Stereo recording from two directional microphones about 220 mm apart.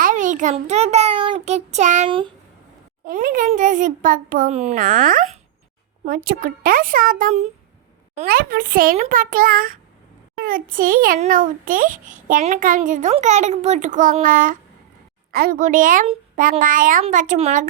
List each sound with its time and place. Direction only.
0.0 s a child's voice: 35° right (ahead or behind)
3.0 s a child's voice: 40° right (ahead or behind)